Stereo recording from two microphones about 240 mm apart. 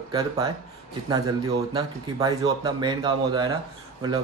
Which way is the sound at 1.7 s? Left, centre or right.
Centre.